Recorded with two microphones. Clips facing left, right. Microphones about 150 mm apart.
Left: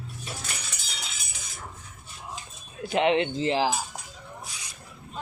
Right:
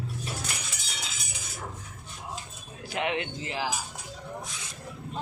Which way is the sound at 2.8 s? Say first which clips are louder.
Left 8 dB; 25° left (ahead or behind).